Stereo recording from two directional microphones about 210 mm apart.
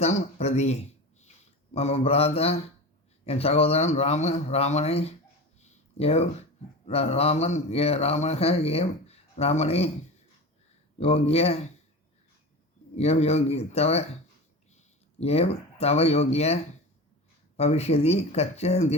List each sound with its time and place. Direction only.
0.0 s speech: 30° left (ahead or behind)
5.5 s a sound: 30° left (ahead or behind)
6.8 s speech: 30° left (ahead or behind)
11.0 s speech: 30° left (ahead or behind)
13.0 s speech: 30° left (ahead or behind)
15.2 s speech: 30° left (ahead or behind)
17.6 s speech: 30° left (ahead or behind)